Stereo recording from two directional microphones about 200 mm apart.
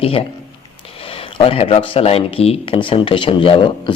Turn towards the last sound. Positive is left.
turn(degrees=25)  # may be behind; listen again after turning